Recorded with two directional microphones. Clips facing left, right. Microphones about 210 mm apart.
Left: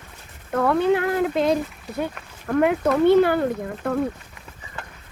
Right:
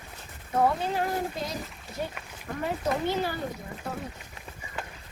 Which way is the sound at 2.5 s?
70° left (ahead or behind).